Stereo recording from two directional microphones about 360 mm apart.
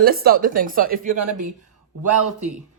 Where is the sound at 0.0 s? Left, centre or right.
Right.